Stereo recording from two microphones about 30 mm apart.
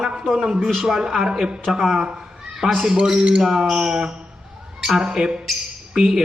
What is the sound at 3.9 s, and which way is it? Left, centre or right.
Speech, right.